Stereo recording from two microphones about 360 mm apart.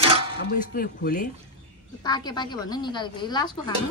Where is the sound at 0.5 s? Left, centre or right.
Left.